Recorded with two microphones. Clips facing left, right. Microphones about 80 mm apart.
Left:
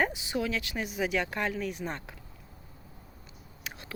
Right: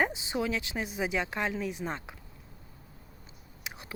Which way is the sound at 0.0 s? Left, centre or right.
Right.